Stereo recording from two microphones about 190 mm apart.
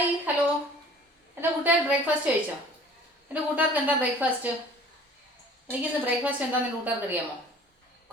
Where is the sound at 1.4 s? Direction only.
5° right (ahead or behind).